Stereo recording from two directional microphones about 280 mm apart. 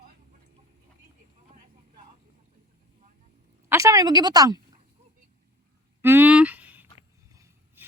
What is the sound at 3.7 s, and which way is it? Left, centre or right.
Speech, centre.